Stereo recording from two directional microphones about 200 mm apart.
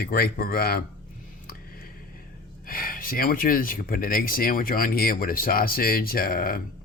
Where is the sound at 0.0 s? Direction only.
50° left (ahead or behind).